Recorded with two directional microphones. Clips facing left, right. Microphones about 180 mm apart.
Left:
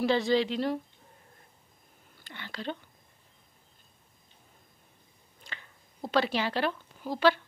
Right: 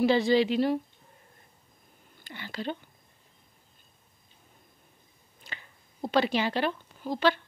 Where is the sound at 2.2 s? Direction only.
5° right (ahead or behind).